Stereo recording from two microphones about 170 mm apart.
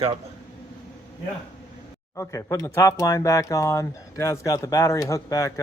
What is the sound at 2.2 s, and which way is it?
Speech, 20° left (ahead or behind).